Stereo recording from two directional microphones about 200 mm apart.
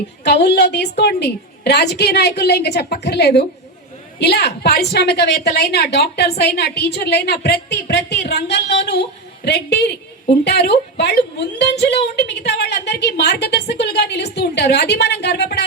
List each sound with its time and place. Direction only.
0.4 s a woman's voice: 55° left (ahead or behind)